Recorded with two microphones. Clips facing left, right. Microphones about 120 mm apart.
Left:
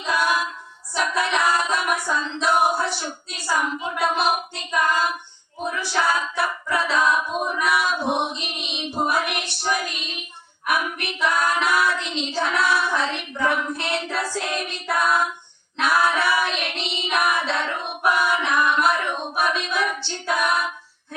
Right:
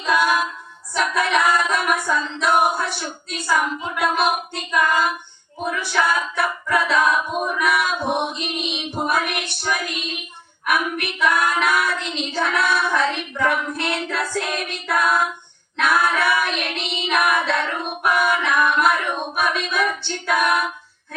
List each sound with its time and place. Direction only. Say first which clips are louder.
0.9 s female singing: right 3 dB; 55° right (ahead or behind)
5.8 s a capella: right 1 dB; 55° right (ahead or behind)
7.6 s female singing: right 1 dB; 55° right (ahead or behind)
9.0 s child singing: even; 55° right (ahead or behind)
14.7 s female singing: right 1 dB; 55° right (ahead or behind)
15.8 s child singing: right 1 dB; 55° right (ahead or behind)